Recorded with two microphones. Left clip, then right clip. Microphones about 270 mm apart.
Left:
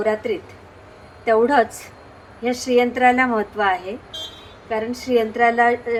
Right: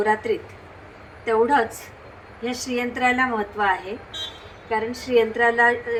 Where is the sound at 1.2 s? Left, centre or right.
Centre.